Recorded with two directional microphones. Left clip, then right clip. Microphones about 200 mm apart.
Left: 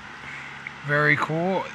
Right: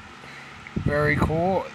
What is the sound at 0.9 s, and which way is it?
Speech, 10° right (ahead or behind).